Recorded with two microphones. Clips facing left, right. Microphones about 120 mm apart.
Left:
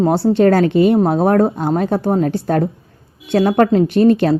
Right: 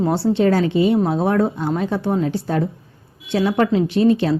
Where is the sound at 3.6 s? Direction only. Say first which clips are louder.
Left 4 dB; 50° left (ahead or behind).